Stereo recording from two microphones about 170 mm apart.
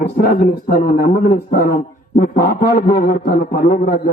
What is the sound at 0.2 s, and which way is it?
A man's voice, 60° left (ahead or behind).